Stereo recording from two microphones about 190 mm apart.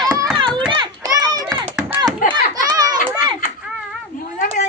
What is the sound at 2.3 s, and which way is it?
Children playing, 20° right (ahead or behind).